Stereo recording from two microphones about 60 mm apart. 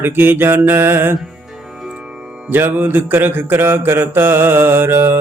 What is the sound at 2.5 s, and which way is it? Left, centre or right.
Mantra, right.